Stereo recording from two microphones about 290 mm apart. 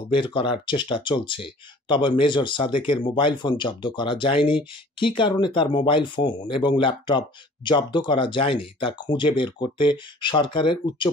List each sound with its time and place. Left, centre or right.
0.1 s speech: centre